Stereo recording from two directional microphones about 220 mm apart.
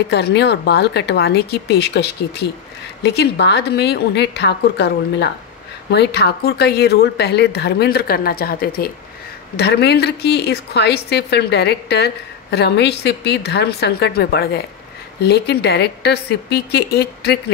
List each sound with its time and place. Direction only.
0.1 s a woman's voice: 50° left (ahead or behind)